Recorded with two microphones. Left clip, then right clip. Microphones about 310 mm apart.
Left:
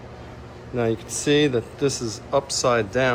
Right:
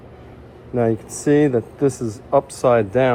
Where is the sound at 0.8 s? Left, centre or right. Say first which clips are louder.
Right 4 dB; centre.